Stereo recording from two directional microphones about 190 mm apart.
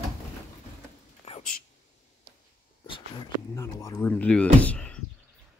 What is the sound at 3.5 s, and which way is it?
Speech, 15° left (ahead or behind).